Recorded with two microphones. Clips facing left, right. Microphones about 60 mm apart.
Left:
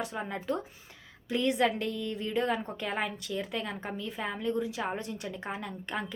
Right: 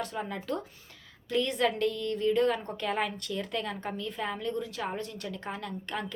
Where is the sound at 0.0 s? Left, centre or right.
Centre.